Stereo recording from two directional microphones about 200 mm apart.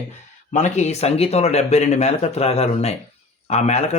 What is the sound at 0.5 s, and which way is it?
Speech, 35° left (ahead or behind).